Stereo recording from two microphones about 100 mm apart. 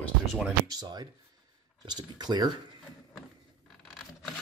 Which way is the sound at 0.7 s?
45° right (ahead or behind).